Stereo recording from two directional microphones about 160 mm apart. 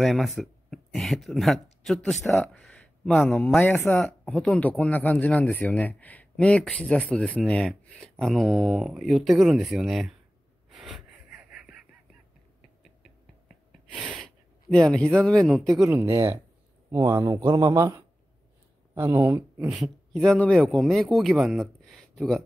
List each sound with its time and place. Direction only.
0.0 s a man's voice: centre (ahead or behind)
10.7 s gasp: centre (ahead or behind)
13.9 s sneeze: 5° right (ahead or behind)
14.2 s speech: 5° left (ahead or behind)
15.8 s speech: 15° right (ahead or behind)
19.7 s a man's voice: centre (ahead or behind)